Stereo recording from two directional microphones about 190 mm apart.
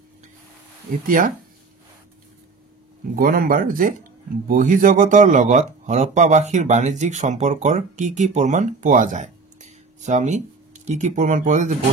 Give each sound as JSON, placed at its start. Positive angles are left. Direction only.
{"t": 1.0, "sound": "speech", "side_deg": -45}
{"t": 3.2, "sound": "speech", "side_deg": -50}